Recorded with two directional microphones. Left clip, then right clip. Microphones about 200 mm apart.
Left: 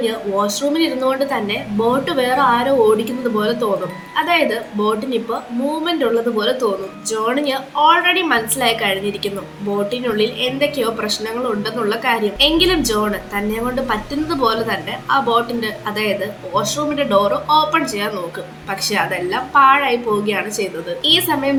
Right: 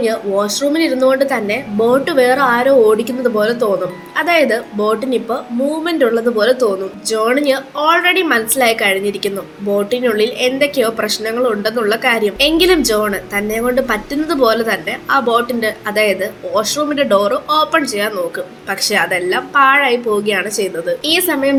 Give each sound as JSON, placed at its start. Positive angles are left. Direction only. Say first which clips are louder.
{"t": 0.0, "sound": "a woman's voice", "louder": "right 3 dB", "side_deg": -20}